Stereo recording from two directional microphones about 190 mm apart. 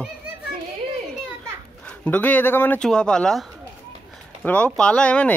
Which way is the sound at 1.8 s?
5° left (ahead or behind).